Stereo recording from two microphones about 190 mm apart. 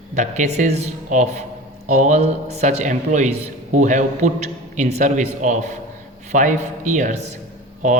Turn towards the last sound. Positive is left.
turn(degrees=-45)  # may be behind; listen again after turning